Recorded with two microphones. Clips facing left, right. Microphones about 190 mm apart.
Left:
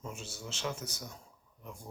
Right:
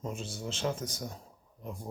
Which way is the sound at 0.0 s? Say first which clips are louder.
Right 6 dB; 30° right (ahead or behind).